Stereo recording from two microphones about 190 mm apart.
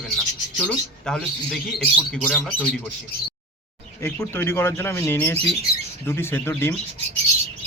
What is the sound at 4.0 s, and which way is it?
Speech, 15° left (ahead or behind).